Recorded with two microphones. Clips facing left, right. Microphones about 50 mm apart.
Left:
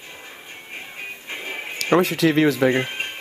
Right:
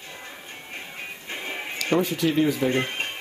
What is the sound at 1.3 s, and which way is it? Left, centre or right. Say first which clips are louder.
Music: left 1 dB; centre.